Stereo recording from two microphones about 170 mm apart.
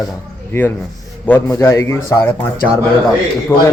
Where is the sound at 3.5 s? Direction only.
10° left (ahead or behind).